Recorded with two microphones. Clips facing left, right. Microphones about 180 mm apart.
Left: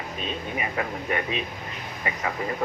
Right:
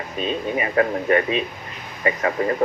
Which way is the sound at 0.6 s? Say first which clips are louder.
Right 11 dB; 65° right (ahead or behind).